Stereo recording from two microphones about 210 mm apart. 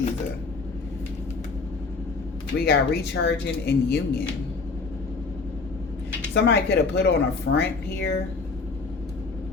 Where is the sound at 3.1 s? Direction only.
55° left (ahead or behind).